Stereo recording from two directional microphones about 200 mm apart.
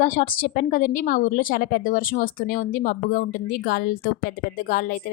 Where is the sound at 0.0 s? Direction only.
45° left (ahead or behind).